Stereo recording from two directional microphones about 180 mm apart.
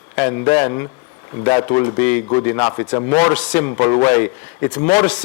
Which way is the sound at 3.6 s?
25° left (ahead or behind).